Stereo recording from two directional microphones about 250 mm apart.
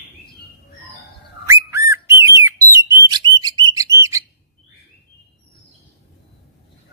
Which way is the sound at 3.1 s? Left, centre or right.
Centre.